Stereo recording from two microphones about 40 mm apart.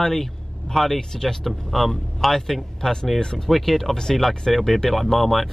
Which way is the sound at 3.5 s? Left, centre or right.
Centre.